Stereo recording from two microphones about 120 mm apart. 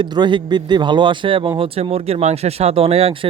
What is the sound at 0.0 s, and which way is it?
Speech, 40° right (ahead or behind).